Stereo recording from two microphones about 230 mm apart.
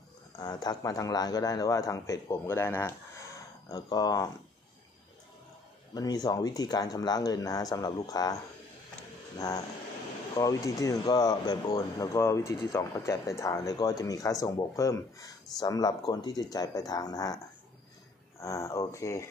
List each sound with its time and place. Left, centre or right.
0.4 s speech: centre
5.9 s speech: centre
10.3 s speech: centre
18.4 s speech: centre